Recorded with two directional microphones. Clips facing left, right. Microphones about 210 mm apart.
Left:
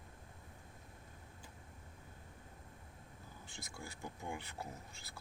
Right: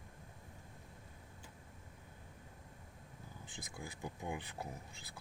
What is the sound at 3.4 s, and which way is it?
Speech, 20° right (ahead or behind).